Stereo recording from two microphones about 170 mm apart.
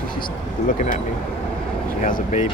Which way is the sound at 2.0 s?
50° left (ahead or behind).